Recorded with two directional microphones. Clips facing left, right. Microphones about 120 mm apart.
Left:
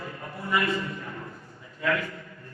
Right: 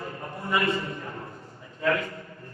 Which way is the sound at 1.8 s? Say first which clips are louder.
Right 2 dB; 35° right (ahead or behind).